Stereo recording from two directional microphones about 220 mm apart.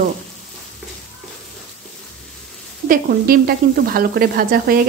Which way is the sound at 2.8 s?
40° right (ahead or behind).